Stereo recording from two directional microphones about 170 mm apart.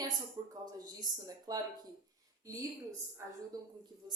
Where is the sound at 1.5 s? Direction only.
20° right (ahead or behind).